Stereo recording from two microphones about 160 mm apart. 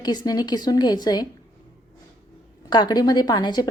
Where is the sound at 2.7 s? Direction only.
25° left (ahead or behind).